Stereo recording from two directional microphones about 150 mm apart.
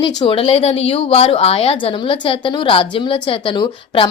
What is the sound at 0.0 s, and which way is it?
A woman's voice, 35° left (ahead or behind).